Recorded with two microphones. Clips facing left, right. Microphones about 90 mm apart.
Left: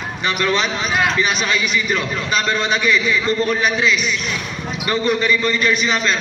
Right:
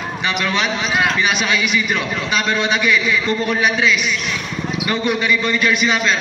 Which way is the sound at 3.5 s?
Centre (ahead or behind).